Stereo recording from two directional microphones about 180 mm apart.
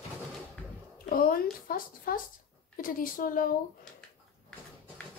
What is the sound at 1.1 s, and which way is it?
Speech, 55° left (ahead or behind).